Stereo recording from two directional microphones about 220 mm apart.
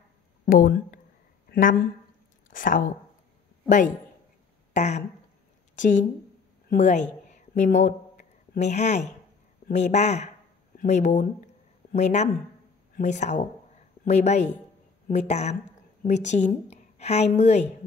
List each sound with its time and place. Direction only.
0.5 s a woman's voice: 40° left (ahead or behind)
6.7 s a woman's voice: 35° left (ahead or behind)
7.2 s a sound: 35° left (ahead or behind)
9.7 s a woman's voice: 35° left (ahead or behind)